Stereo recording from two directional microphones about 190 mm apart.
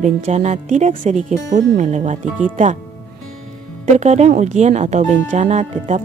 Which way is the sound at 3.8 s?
35° right (ahead or behind).